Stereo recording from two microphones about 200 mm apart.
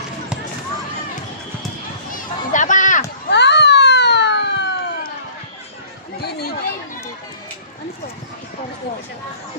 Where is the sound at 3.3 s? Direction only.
60° left (ahead or behind).